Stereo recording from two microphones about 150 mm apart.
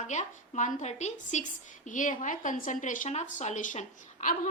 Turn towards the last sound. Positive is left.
turn(degrees=55)  # may be behind; listen again after turning